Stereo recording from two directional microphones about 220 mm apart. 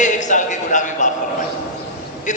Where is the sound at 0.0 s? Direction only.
35° left (ahead or behind).